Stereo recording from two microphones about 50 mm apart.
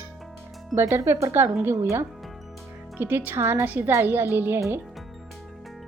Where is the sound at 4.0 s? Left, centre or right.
Right.